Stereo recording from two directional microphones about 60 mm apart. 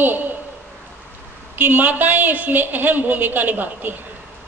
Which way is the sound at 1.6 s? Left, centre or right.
Right.